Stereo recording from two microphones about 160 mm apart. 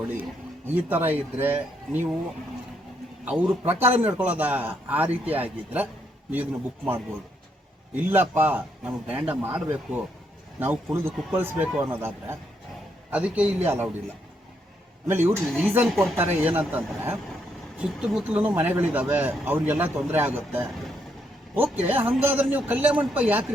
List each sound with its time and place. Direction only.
0.7 s speech: 10° right (ahead or behind)
3.2 s speech: 10° right (ahead or behind)
15.0 s speech: 15° right (ahead or behind)